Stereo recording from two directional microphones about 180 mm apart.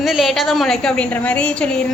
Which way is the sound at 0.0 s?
Centre (ahead or behind).